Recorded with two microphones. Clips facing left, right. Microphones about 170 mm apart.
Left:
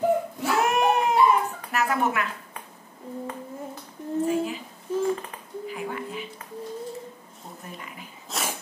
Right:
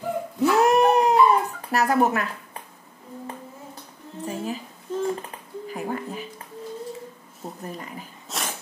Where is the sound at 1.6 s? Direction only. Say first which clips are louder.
Right 6 dB; 35° right (ahead or behind).